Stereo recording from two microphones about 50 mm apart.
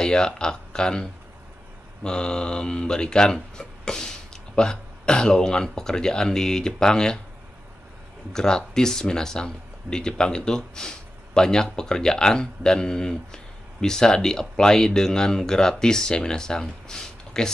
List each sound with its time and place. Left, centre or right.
0.0 s speech: centre
2.0 s speech: centre
8.3 s speech: centre